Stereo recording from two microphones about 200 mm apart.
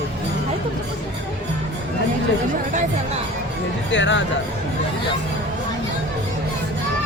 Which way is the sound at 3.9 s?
65° left (ahead or behind).